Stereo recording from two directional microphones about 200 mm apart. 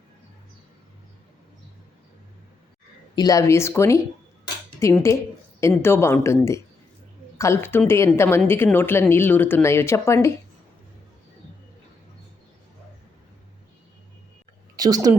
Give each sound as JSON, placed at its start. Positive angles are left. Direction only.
{"t": 3.2, "sound": "a woman's voice", "side_deg": 15}
{"t": 14.8, "sound": "a woman's voice", "side_deg": -20}